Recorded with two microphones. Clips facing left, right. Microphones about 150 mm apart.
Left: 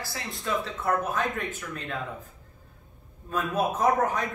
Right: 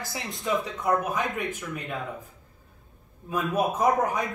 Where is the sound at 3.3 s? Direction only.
10° right (ahead or behind).